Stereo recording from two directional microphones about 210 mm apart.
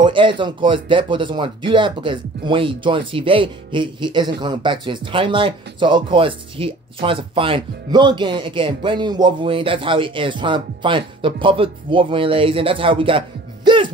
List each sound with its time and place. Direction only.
0.0 s speech: 25° right (ahead or behind)
13.7 s music: 20° right (ahead or behind)